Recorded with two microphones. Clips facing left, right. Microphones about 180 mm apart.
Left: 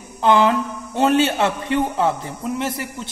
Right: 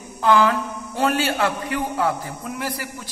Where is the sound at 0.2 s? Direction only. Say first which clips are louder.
Left 2 dB; 25° left (ahead or behind).